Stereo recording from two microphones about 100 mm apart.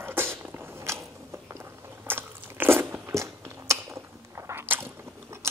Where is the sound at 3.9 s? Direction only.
25° right (ahead or behind).